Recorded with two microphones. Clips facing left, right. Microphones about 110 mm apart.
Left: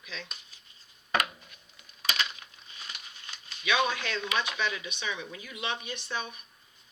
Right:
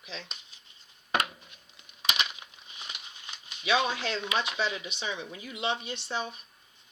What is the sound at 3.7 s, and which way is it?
Speech, 30° right (ahead or behind).